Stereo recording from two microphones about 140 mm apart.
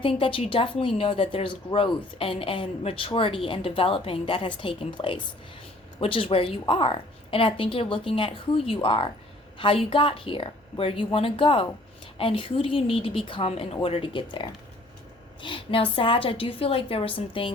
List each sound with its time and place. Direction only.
0.0 s speech: 40° left (ahead or behind)